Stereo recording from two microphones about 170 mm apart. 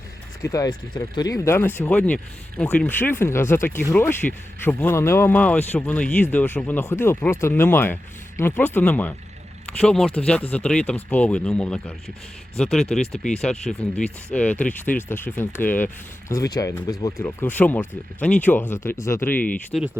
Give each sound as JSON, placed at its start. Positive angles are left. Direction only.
{"t": 0.4, "sound": "speech", "side_deg": 20}
{"t": 17.2, "sound": "speech", "side_deg": 10}